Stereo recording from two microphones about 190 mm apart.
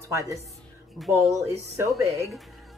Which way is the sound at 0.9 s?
Centre (ahead or behind).